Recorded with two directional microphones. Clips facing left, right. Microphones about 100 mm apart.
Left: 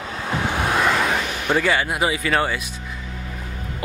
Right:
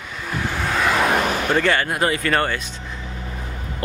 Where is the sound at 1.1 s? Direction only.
50° right (ahead or behind).